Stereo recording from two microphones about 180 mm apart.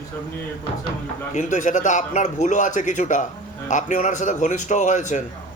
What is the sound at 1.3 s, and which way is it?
A man's voice, 45° left (ahead or behind).